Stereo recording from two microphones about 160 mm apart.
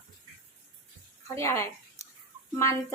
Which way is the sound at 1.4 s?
15° left (ahead or behind).